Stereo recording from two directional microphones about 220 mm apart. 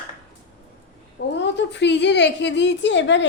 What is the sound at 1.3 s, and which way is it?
A woman's voice, 55° left (ahead or behind).